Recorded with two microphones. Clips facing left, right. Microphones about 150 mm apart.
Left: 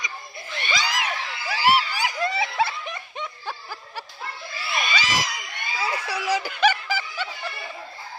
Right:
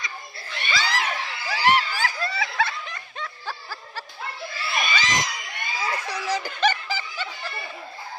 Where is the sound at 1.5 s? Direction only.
10° left (ahead or behind).